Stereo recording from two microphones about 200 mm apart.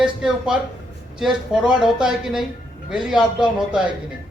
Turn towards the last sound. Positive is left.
turn(degrees=-5)  # may be behind; listen again after turning